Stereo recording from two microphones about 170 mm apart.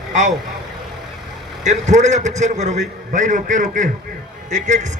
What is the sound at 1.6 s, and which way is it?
A man's voice, 45° right (ahead or behind).